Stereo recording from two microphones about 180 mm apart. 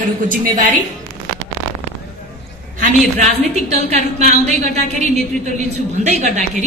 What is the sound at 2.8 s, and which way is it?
A woman's voice, 40° right (ahead or behind).